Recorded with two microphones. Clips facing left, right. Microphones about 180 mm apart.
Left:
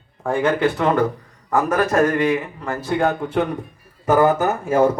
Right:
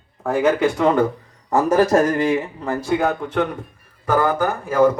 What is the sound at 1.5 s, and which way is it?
A man's voice, 25° right (ahead or behind).